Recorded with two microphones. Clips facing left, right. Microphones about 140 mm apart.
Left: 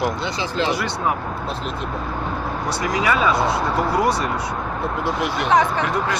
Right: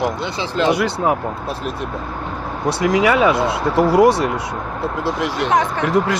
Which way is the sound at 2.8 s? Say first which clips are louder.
Right 6 dB; 90° right.